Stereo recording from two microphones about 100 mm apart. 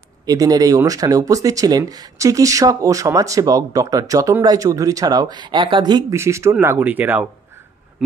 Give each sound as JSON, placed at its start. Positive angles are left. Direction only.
{"t": 0.3, "sound": "speech", "side_deg": -40}
{"t": 6.1, "sound": "speech", "side_deg": -30}